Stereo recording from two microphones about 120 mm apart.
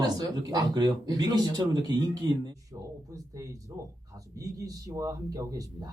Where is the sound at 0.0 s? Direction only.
30° right (ahead or behind).